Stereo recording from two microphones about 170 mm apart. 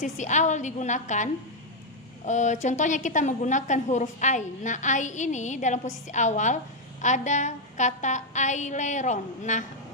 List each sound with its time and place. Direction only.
0.0 s a woman's voice: 45° left (ahead or behind)